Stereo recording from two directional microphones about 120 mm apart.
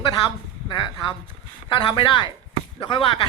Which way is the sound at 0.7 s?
40° left (ahead or behind).